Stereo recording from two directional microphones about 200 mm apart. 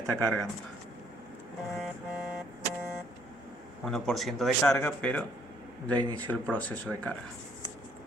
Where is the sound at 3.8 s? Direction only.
Centre (ahead or behind).